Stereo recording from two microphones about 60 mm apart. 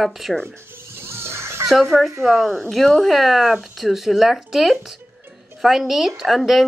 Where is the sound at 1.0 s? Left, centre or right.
Right.